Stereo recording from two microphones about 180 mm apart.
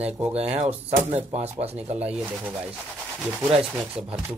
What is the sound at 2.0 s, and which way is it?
Speech, 10° right (ahead or behind).